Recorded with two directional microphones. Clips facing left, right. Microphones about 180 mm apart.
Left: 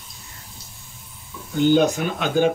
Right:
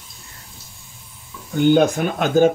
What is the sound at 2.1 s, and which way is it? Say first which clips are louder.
Speech: right 6 dB; 45° right (ahead or behind).